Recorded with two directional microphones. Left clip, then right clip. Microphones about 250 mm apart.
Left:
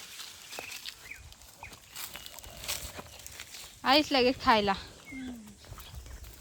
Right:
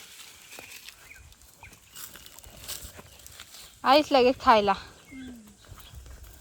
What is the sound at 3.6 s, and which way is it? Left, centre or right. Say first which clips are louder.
Speech: right 4 dB; centre.